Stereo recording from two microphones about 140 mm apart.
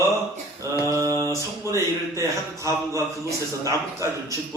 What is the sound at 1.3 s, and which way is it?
A man's voice, 20° right (ahead or behind).